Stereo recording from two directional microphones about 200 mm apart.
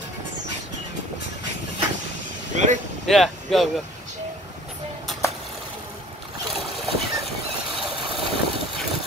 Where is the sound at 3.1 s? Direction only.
Centre (ahead or behind).